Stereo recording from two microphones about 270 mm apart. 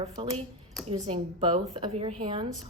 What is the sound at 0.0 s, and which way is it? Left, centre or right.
A woman's voice, centre.